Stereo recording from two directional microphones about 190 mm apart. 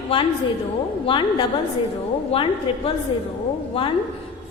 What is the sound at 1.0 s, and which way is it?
A woman's voice, 25° left (ahead or behind).